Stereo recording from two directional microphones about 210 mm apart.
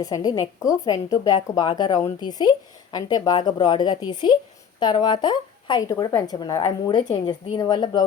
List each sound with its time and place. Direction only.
0.0 s a woman's voice: 15° left (ahead or behind)